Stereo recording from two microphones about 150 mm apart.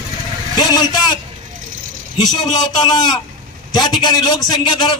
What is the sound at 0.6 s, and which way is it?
Speech, 25° left (ahead or behind).